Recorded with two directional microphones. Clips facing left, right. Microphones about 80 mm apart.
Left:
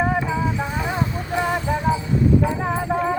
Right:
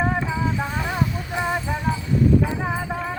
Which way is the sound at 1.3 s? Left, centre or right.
Centre.